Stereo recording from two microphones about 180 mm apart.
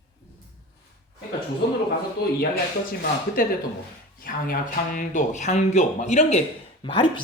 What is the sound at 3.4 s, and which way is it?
Speech, 50° left (ahead or behind).